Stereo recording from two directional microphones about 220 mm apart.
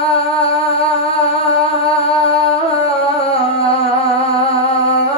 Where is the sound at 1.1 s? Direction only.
25° left (ahead or behind).